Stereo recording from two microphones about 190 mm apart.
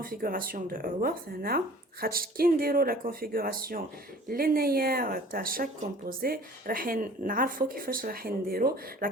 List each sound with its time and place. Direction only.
0.0 s speech: 50° right (ahead or behind)